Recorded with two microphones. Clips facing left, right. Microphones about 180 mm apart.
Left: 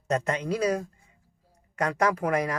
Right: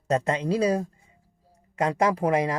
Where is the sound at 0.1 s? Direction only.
30° right (ahead or behind).